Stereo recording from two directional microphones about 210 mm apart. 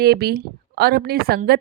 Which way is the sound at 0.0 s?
50° right (ahead or behind).